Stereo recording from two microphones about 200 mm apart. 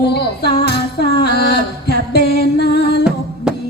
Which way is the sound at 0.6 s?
55° left (ahead or behind).